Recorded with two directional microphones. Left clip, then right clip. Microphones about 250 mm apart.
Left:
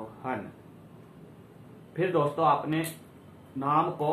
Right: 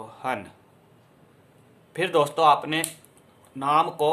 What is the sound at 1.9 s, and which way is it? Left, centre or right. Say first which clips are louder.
Speech: right 4 dB; right.